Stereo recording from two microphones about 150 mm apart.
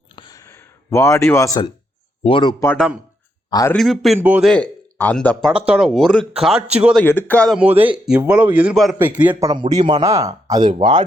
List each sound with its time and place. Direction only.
0.2 s a sound: 25° left (ahead or behind)
2.2 s speech: 35° left (ahead or behind)
3.8 s speech: centre (ahead or behind)
4.2 s speech: 10° right (ahead or behind)
4.4 s speech: 10° left (ahead or behind)
5.5 s speech: 5° right (ahead or behind)
7.0 s a man's voice: 10° left (ahead or behind)
7.5 s speech: 10° right (ahead or behind)
9.0 s speech: 10° right (ahead or behind)
9.4 s speech: 25° right (ahead or behind)